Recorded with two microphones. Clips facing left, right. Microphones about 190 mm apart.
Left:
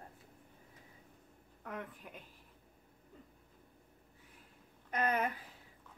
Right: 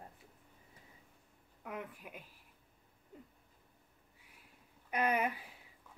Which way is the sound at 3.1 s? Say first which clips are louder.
Right 3 dB; 15° right (ahead or behind).